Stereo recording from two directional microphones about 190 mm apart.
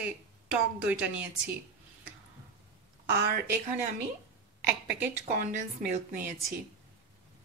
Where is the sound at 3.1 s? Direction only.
50° right (ahead or behind).